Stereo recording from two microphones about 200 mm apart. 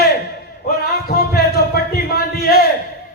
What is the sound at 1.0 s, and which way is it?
A man's voice, 50° left (ahead or behind).